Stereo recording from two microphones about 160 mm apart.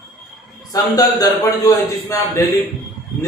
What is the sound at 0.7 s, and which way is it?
Speech, 20° left (ahead or behind).